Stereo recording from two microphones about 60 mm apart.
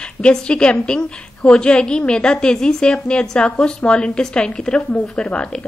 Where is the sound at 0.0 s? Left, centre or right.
Centre.